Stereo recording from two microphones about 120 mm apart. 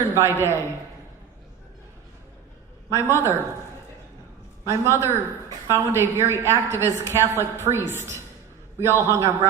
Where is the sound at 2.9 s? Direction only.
20° right (ahead or behind).